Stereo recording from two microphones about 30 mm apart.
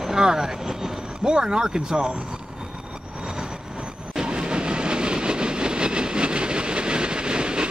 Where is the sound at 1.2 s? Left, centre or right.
Right.